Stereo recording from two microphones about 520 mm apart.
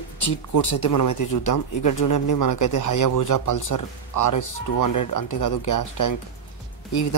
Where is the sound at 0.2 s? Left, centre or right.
Left.